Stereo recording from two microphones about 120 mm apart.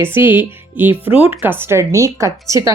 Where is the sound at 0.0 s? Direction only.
20° right (ahead or behind).